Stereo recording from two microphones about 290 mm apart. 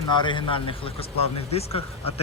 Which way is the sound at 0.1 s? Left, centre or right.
Centre.